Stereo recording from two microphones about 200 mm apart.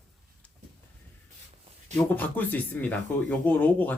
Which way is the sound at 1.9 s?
10° left (ahead or behind).